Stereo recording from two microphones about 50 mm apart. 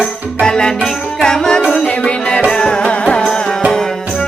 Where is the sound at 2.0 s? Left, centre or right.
Left.